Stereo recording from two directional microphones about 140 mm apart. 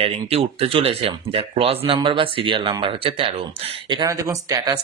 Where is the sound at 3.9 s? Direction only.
25° right (ahead or behind).